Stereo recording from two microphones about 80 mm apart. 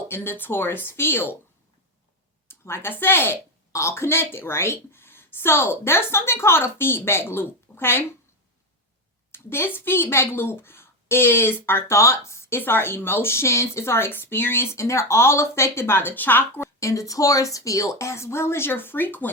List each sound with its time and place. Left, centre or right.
0.1 s speech: left
2.5 s a woman's voice: left
9.3 s speech: left
16.8 s speech: left